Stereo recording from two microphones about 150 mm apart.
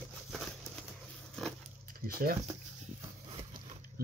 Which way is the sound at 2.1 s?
75° right (ahead or behind).